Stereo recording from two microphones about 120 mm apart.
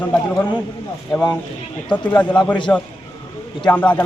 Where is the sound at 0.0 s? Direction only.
5° left (ahead or behind).